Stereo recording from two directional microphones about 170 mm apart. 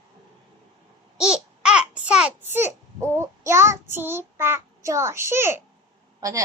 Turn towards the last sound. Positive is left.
turn(degrees=-20)  # may be behind; listen again after turning